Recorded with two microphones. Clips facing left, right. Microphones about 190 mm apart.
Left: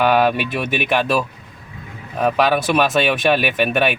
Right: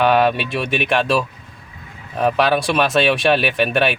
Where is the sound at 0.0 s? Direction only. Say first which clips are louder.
Even; 5° left (ahead or behind).